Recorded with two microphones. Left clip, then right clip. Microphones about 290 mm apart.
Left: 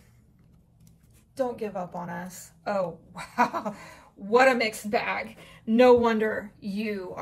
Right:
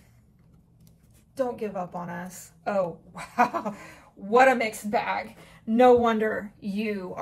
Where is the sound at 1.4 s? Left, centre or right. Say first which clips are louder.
Right 1 dB; centre.